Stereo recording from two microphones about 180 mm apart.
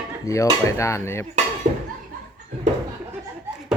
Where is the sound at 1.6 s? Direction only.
50° right (ahead or behind).